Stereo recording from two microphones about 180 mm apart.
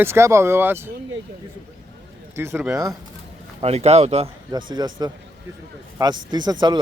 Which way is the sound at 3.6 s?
35° right (ahead or behind).